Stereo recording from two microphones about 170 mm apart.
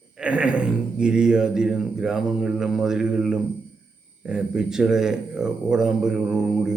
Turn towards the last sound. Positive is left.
turn(degrees=-5)  # may be behind; listen again after turning